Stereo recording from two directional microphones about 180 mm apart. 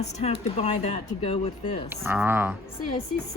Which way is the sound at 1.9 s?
10° right (ahead or behind).